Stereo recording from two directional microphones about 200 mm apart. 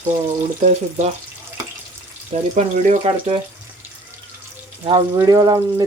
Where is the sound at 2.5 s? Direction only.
35° right (ahead or behind).